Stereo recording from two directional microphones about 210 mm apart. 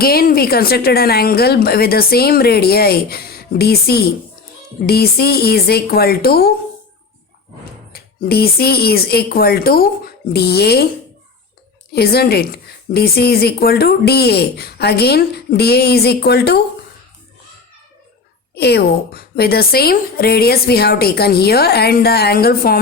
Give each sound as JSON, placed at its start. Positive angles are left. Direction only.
{"t": 0.0, "sound": "a woman's voice", "side_deg": 45}
{"t": 7.9, "sound": "a woman's voice", "side_deg": 45}
{"t": 11.9, "sound": "a woman's voice", "side_deg": 50}
{"t": 18.5, "sound": "a woman's voice", "side_deg": 50}